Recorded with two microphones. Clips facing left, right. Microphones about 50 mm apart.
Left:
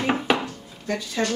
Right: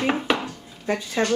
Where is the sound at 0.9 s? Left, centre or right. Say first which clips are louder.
Right 2 dB; centre.